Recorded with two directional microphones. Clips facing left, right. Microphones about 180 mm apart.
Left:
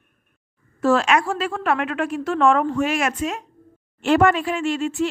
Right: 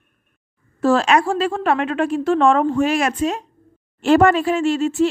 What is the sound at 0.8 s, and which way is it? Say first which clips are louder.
Speech: right 2 dB; 35° right (ahead or behind).